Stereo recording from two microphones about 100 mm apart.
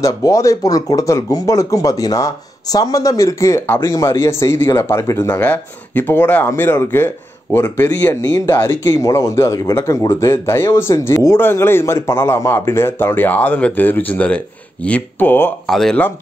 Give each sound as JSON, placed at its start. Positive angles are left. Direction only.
{"t": 0.0, "sound": "a man's voice", "side_deg": 35}
{"t": 5.4, "sound": "a man's voice", "side_deg": 15}
{"t": 15.6, "sound": "speech", "side_deg": 5}